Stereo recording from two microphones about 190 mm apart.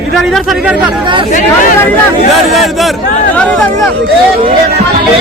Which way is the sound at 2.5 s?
Centre (ahead or behind).